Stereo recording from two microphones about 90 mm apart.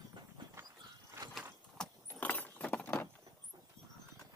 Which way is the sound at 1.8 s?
20° left (ahead or behind).